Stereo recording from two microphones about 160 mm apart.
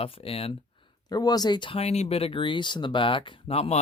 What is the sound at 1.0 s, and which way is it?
Speech, 25° left (ahead or behind).